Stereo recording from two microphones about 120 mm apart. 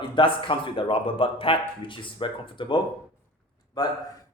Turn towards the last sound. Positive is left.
turn(degrees=35)  # may be behind; listen again after turning